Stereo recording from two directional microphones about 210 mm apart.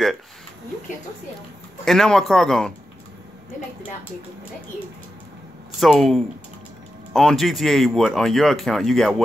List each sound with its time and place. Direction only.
1.9 s speech: centre (ahead or behind)
5.8 s speech: centre (ahead or behind)